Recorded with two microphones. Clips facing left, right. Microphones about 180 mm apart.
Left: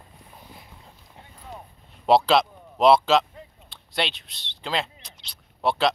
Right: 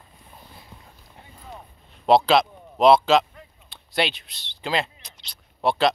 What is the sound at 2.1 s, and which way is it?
Speech, centre (ahead or behind).